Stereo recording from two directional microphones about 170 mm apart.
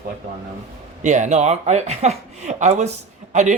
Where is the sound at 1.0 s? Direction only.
45° right (ahead or behind).